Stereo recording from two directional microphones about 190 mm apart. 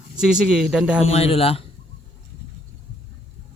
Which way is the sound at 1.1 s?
30° left (ahead or behind).